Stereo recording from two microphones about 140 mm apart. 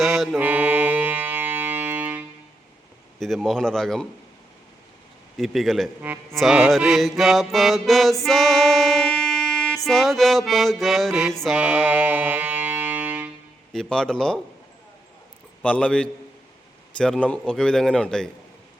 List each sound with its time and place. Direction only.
0.0 s mantra: centre (ahead or behind)
0.3 s music: 10° right (ahead or behind)
3.2 s mantra: centre (ahead or behind)
5.4 s mantra: centre (ahead or behind)
8.2 s speech: centre (ahead or behind)
11.4 s music: 10° right (ahead or behind)
13.7 s mantra: 5° left (ahead or behind)
15.6 s a man's voice: 10° left (ahead or behind)
17.0 s mantra: 5° left (ahead or behind)